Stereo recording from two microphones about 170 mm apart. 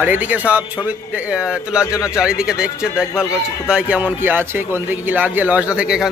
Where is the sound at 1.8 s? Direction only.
20° left (ahead or behind).